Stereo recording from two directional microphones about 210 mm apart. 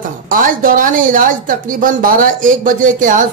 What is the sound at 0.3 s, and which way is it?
Speech, 40° right (ahead or behind).